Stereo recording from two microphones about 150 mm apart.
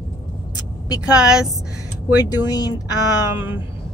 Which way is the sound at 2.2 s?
25° left (ahead or behind).